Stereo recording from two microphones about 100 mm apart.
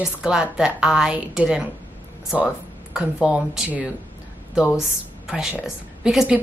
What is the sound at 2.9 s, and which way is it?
A woman's voice, 10° right (ahead or behind).